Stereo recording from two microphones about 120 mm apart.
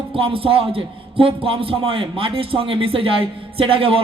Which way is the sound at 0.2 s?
50° right (ahead or behind).